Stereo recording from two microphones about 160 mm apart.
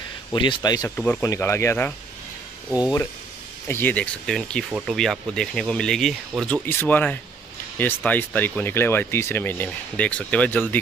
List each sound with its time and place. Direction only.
0.3 s speech: 30° left (ahead or behind)
0.9 s speech: 10° left (ahead or behind)
3.6 s speech: 15° left (ahead or behind)